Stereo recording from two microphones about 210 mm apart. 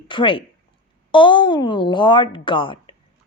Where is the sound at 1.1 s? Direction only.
25° left (ahead or behind).